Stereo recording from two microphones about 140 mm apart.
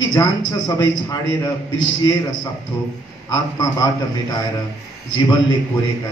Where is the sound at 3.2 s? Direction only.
25° left (ahead or behind).